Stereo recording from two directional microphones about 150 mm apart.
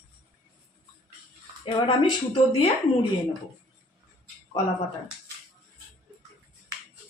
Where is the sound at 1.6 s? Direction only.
35° left (ahead or behind).